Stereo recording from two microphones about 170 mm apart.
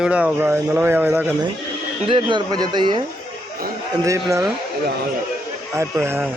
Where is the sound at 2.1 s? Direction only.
30° right (ahead or behind).